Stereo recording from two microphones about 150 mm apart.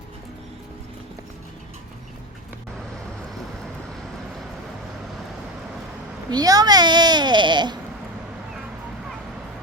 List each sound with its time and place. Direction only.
6.3 s speech: 25° right (ahead or behind)